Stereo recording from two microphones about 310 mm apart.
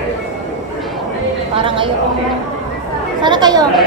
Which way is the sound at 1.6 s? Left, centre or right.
Centre.